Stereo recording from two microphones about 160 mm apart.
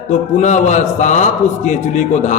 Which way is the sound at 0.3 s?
50° left (ahead or behind).